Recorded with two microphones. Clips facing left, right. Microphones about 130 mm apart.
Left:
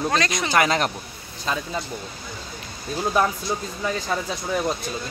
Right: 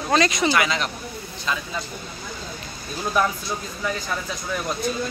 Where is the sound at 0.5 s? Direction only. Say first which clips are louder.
Left 2 dB; 45° left (ahead or behind).